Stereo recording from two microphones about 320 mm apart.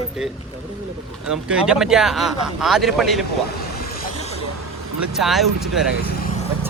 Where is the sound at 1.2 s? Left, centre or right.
Centre.